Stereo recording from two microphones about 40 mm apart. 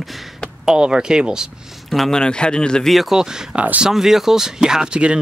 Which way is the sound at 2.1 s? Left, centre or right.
Left.